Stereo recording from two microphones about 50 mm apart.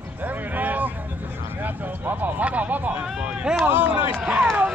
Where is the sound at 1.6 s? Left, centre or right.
Right.